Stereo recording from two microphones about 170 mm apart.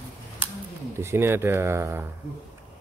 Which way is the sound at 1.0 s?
15° right (ahead or behind).